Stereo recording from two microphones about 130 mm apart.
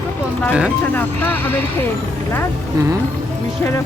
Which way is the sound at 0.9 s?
15° left (ahead or behind).